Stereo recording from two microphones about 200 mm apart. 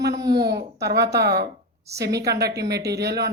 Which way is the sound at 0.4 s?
55° right (ahead or behind).